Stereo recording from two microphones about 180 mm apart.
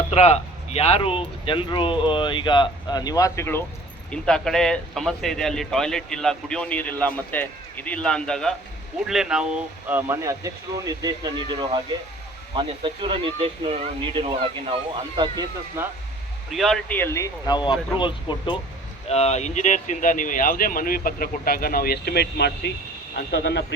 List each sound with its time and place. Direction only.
0.1 s speech: 35° left (ahead or behind); by 3.6 s 15° left (ahead or behind)
4.1 s speech: 5° left (ahead or behind); by 13.1 s 30° right (ahead or behind)
14.2 s speech: 30° right (ahead or behind)
16.5 s speech: centre (ahead or behind); by 23.6 s 70° left (ahead or behind)